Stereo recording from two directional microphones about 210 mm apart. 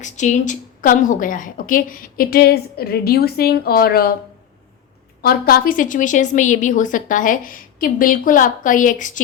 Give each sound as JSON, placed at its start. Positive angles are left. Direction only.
{"t": 0.0, "sound": "a woman's voice", "side_deg": 35}
{"t": 5.2, "sound": "a woman's voice", "side_deg": 45}